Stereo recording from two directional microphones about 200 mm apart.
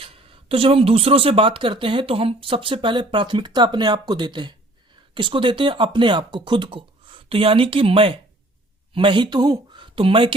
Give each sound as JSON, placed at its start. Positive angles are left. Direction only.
{"t": 0.0, "sound": "speech", "side_deg": -25}